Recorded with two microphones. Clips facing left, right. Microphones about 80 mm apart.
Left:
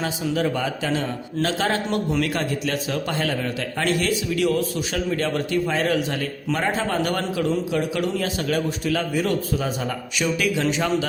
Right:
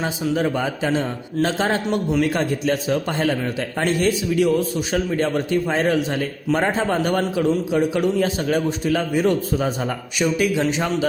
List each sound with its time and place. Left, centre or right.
0.0 s a man's voice: right